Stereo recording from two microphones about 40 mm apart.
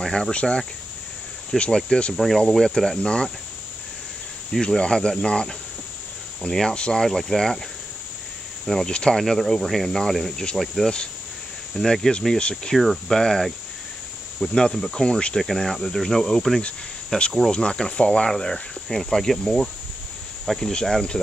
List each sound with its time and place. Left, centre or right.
0.0 s speech: centre
0.3 s speech: left
1.5 s speech: centre
2.1 s speech: centre
3.0 s speech: left
4.5 s speech: centre
7.1 s speech: centre
8.8 s speech: centre
9.2 s speech: centre
12.4 s speech: left
12.7 s speech: centre
13.1 s speech: centre
15.4 s speech: centre; by 18.3 s left
18.3 s speech: centre